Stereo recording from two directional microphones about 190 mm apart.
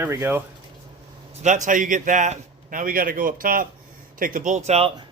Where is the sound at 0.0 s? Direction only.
10° right (ahead or behind).